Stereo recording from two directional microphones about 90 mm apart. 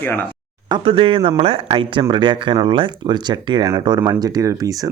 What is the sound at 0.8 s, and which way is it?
Speech, 90° right.